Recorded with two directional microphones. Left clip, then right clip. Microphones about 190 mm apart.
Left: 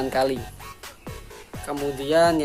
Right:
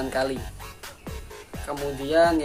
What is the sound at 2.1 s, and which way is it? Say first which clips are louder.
Speech: left 1 dB; 50° left (ahead or behind).